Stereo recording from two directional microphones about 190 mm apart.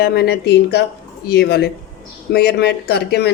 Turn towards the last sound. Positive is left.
turn(degrees=60)  # may be behind; listen again after turning